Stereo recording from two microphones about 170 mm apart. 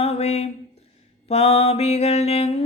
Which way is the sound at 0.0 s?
35° left (ahead or behind).